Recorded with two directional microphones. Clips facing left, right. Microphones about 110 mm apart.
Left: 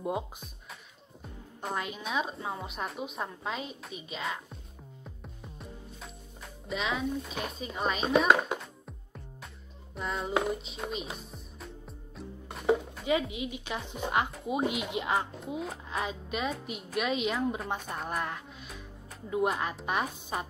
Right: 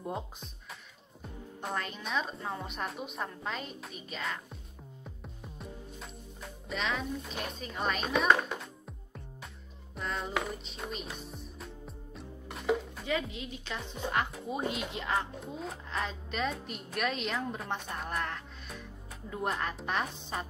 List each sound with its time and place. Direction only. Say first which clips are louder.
0.0 s a woman's voice: left 4 dB; 10° left (ahead or behind)
1.6 s a woman's voice: left 2 dB; 5° left (ahead or behind)
5.0 s music: even; centre (ahead or behind)
10.6 s speech: left 3 dB; centre (ahead or behind)
13.0 s a woman's voice: left 5 dB; 15° left (ahead or behind)
15.6 s a woman's voice: even; 5° left (ahead or behind)